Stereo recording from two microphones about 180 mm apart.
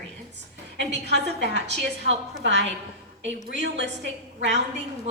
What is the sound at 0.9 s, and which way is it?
Speech, 70° right (ahead or behind).